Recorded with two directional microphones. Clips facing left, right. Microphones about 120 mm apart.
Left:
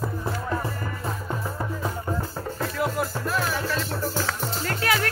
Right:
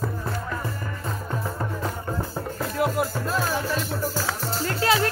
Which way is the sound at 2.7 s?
20° right (ahead or behind).